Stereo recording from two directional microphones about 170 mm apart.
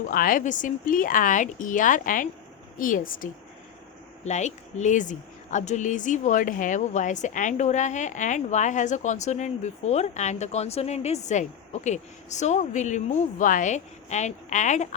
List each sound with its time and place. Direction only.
0.1 s speech: 55° left (ahead or behind)
4.2 s speech: 45° left (ahead or behind)